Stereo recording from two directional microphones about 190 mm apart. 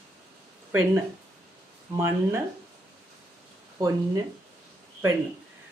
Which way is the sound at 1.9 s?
10° right (ahead or behind).